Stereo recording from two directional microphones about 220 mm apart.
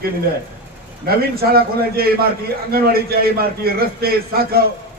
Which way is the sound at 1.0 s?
45° right (ahead or behind).